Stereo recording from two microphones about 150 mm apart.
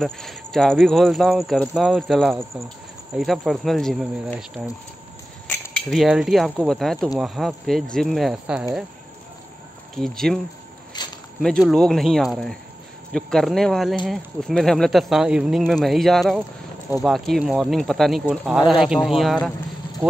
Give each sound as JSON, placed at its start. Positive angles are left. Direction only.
{"t": 0.0, "sound": "speech", "side_deg": 5}
{"t": 5.5, "sound": "cutlery", "side_deg": 5}
{"t": 6.6, "sound": "speech", "side_deg": 0}
{"t": 9.9, "sound": "speech", "side_deg": 5}
{"t": 10.9, "sound": "a sound", "side_deg": 30}
{"t": 11.7, "sound": "speech", "side_deg": 5}